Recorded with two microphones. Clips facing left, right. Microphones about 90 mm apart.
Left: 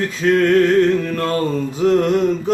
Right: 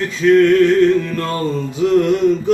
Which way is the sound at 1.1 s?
40° left (ahead or behind).